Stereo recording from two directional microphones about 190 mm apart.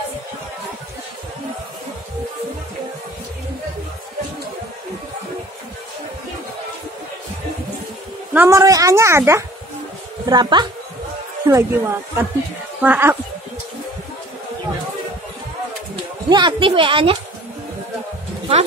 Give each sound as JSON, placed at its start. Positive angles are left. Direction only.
{"t": 8.3, "sound": "a woman's voice", "side_deg": -10}
{"t": 16.3, "sound": "speech", "side_deg": -25}